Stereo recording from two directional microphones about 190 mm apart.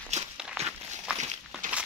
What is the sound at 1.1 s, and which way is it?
Walk, 35° right (ahead or behind).